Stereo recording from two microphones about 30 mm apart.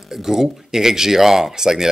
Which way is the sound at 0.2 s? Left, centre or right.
Centre.